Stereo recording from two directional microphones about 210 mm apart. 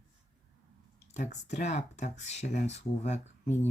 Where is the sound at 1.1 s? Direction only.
35° left (ahead or behind).